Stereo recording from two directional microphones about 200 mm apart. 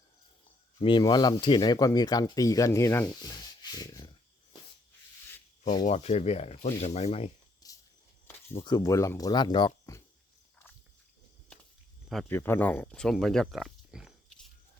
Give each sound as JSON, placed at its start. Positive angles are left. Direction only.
{"t": 0.8, "sound": "speech", "side_deg": 25}
{"t": 5.8, "sound": "speech", "side_deg": 35}
{"t": 7.6, "sound": "a sound", "side_deg": 20}
{"t": 8.5, "sound": "speech", "side_deg": 20}
{"t": 12.3, "sound": "speech", "side_deg": 10}